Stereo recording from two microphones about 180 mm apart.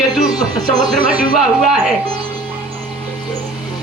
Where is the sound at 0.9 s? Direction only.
Centre (ahead or behind).